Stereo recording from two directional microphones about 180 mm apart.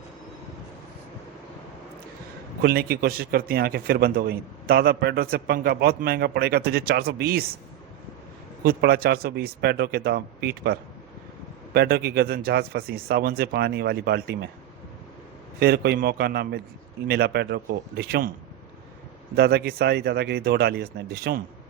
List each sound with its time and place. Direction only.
2.6 s a man's voice: 60° right (ahead or behind)
8.6 s a man's voice: 60° right (ahead or behind)
15.6 s a man's voice: 60° right (ahead or behind)
19.4 s a man's voice: 60° right (ahead or behind)